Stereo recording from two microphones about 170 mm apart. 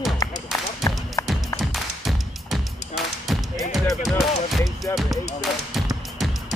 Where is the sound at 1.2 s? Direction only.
20° left (ahead or behind).